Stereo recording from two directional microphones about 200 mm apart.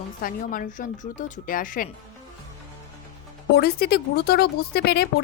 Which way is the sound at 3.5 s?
50° left (ahead or behind).